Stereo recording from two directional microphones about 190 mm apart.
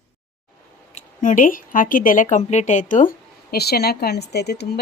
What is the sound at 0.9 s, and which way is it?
A woman's voice, 40° left (ahead or behind).